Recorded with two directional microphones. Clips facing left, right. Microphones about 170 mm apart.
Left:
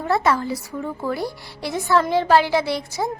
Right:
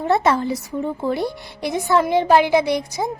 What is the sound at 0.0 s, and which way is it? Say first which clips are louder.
A woman's voice: right 2 dB; 25° right (ahead or behind).